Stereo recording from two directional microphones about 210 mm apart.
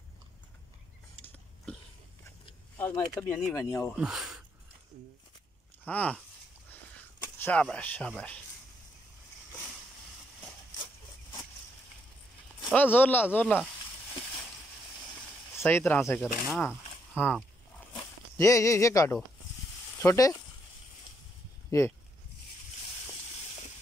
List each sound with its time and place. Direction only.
1.7 s a sound: 5° left (ahead or behind)
2.8 s speech: 20° left (ahead or behind)
3.2 s speech: 5° left (ahead or behind)
3.9 s speech: 5° right (ahead or behind)
5.9 s speech: 5° left (ahead or behind)
7.3 s speech: 10° left (ahead or behind)
12.7 s speech: 10° left (ahead or behind)
15.5 s speech: 10° left (ahead or behind)
18.4 s speech: 15° left (ahead or behind)
21.6 s speech: 15° left (ahead or behind)